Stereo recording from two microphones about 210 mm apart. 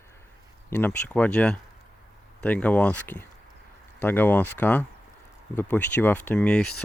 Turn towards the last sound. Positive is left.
turn(degrees=5)  # may be behind; listen again after turning